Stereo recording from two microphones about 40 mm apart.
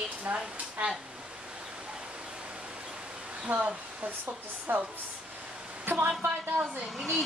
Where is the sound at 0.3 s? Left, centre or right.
Right.